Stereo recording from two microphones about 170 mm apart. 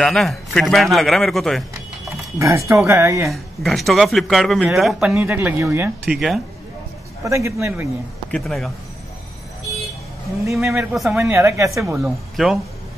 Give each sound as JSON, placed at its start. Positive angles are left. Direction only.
{"t": 0.0, "sound": "a man's voice", "side_deg": 0}
{"t": 2.3, "sound": "speech", "side_deg": -15}
{"t": 3.3, "sound": "a man's voice", "side_deg": 0}
{"t": 5.1, "sound": "speech", "side_deg": -10}
{"t": 6.0, "sound": "a man's voice", "side_deg": 0}
{"t": 7.2, "sound": "speech", "side_deg": -15}
{"t": 8.3, "sound": "a man's voice", "side_deg": 0}
{"t": 10.9, "sound": "a man's voice", "side_deg": -5}
{"t": 11.2, "sound": "speech", "side_deg": -15}
{"t": 11.8, "sound": "a man's voice", "side_deg": 0}